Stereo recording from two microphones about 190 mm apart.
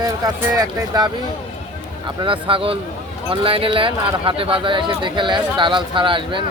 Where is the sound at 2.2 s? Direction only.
25° right (ahead or behind).